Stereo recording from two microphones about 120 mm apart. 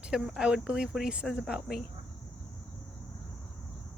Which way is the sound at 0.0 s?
5° right (ahead or behind).